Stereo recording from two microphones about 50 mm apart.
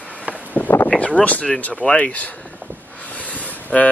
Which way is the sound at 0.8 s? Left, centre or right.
Left.